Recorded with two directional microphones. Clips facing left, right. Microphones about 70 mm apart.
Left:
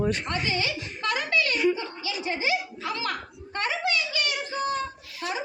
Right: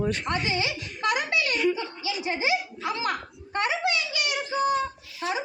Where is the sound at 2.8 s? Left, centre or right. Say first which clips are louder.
Right 2 dB; right.